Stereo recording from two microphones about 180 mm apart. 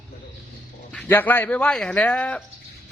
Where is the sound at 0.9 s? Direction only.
10° left (ahead or behind).